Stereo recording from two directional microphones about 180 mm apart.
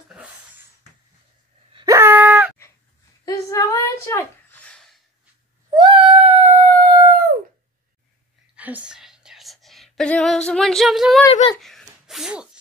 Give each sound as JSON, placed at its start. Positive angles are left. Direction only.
{"t": 1.9, "sound": "groan", "side_deg": -15}
{"t": 3.3, "sound": "a sound", "side_deg": 20}
{"t": 5.8, "sound": "dog", "side_deg": -30}
{"t": 8.5, "sound": "whispering", "side_deg": -10}
{"t": 11.6, "sound": "sneeze", "side_deg": 0}